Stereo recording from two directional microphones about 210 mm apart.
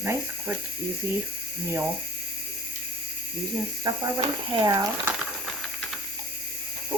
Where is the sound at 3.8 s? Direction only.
20° right (ahead or behind).